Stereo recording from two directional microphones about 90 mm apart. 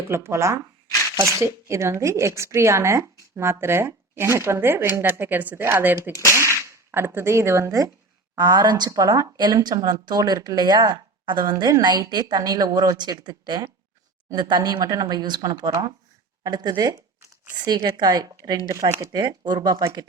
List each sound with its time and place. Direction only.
0.1 s speech: 30° right (ahead or behind)
6.1 s whip: 30° right (ahead or behind)
8.4 s a woman's voice: 50° right (ahead or behind)
8.9 s a woman's voice: 40° right (ahead or behind)
19.1 s a woman's voice: 55° right (ahead or behind)